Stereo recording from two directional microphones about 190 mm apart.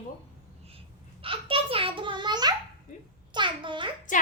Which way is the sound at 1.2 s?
30° right (ahead or behind).